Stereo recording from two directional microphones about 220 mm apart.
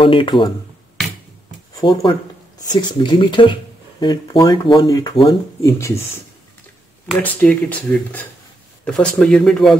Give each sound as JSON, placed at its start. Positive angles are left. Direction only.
{"t": 0.0, "sound": "speech", "side_deg": 25}
{"t": 1.8, "sound": "speech", "side_deg": 20}
{"t": 7.1, "sound": "speech", "side_deg": 5}
{"t": 8.8, "sound": "speech", "side_deg": 5}